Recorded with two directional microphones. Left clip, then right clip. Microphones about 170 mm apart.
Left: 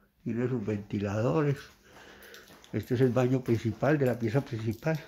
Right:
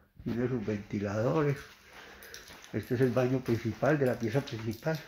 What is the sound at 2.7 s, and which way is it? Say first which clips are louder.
Speech: left 2 dB; 35° left (ahead or behind).